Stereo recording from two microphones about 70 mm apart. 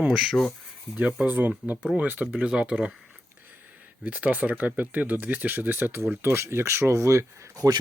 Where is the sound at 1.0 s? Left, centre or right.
Right.